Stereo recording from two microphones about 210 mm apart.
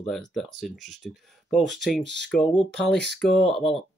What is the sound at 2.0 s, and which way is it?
Speech, 55° right (ahead or behind).